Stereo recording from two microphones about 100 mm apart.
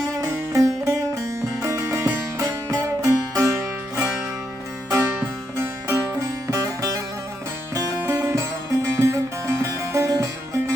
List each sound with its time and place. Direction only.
0.2 s music: 30° right (ahead or behind)
5.5 s music: 30° right (ahead or behind)
8.1 s music: 30° right (ahead or behind)